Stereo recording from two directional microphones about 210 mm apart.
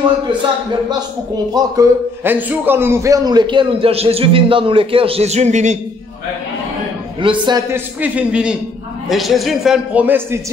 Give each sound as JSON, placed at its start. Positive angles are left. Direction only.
{"t": 0.8, "sound": "a man's voice", "side_deg": -20}
{"t": 7.2, "sound": "a man's voice", "side_deg": -20}
{"t": 8.0, "sound": "a man's voice", "side_deg": -5}